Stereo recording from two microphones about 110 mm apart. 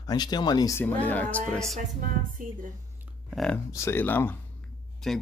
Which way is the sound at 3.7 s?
25° left (ahead or behind).